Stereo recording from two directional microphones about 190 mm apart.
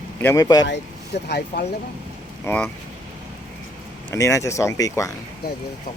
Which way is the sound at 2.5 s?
15° left (ahead or behind).